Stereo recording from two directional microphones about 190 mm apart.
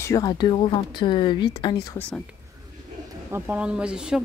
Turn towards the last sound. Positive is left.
turn(degrees=-5)  # may be behind; listen again after turning